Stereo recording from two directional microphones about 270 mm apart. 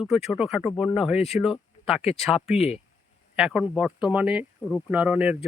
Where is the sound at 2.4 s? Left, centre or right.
Left.